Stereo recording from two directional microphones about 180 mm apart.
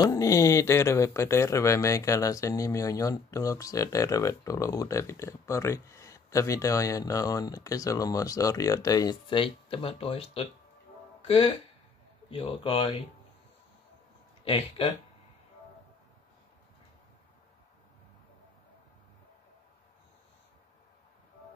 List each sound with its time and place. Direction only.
0.0 s speech: 20° left (ahead or behind)
14.4 s speech: 35° left (ahead or behind)